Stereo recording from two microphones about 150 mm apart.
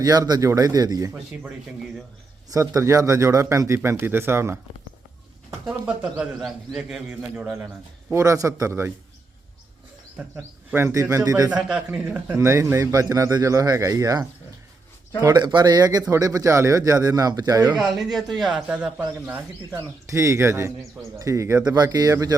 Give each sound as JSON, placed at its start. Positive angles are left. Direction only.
{"t": 0.0, "sound": "a man's voice", "side_deg": -25}
{"t": 2.5, "sound": "a man's voice", "side_deg": -20}
{"t": 5.6, "sound": "a man's voice", "side_deg": -5}
{"t": 10.2, "sound": "speech", "side_deg": -10}
{"t": 10.8, "sound": "a man's voice", "side_deg": -20}
{"t": 11.5, "sound": "a man's voice", "side_deg": -10}
{"t": 17.7, "sound": "speech", "side_deg": 0}